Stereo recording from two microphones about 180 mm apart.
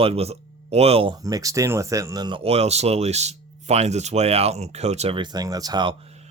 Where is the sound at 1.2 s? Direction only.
20° right (ahead or behind).